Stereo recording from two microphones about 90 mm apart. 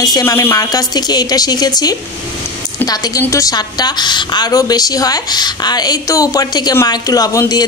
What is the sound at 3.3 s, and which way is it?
A woman's voice, 40° left (ahead or behind).